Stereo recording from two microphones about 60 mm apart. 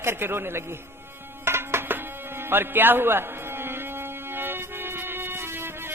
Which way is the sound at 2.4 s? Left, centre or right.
Right.